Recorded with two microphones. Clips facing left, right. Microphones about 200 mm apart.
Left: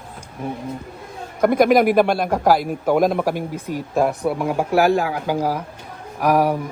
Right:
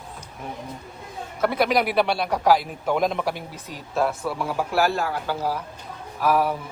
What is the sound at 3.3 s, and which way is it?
Speech, 50° left (ahead or behind).